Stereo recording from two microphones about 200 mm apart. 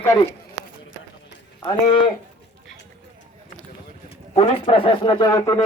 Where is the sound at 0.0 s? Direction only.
10° left (ahead or behind).